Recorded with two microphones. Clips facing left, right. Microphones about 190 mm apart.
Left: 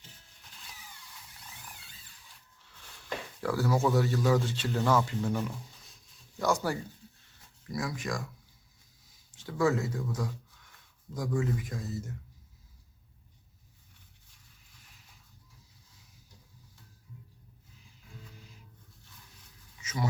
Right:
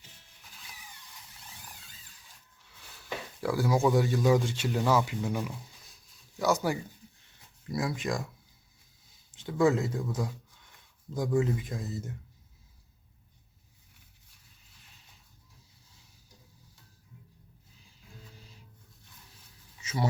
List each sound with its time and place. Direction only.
3.4 s speech: 10° right (ahead or behind)
7.7 s speech: 25° right (ahead or behind)
9.3 s speech: 20° right (ahead or behind)
19.8 s a sound: 30° right (ahead or behind)